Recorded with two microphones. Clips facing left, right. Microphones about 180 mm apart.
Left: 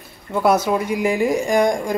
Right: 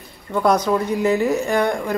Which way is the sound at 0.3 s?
10° left (ahead or behind).